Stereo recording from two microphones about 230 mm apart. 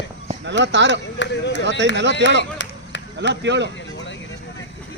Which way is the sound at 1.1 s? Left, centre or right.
Left.